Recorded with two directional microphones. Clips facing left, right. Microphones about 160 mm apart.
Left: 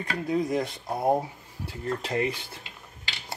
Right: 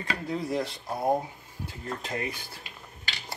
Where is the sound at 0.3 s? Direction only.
15° left (ahead or behind).